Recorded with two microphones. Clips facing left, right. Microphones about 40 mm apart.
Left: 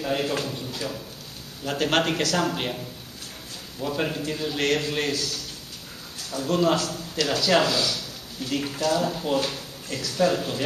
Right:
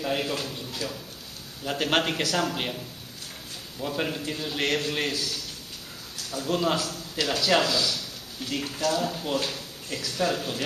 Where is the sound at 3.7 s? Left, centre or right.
Centre.